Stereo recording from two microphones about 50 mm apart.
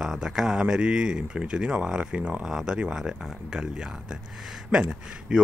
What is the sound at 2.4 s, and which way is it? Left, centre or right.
Speech, centre.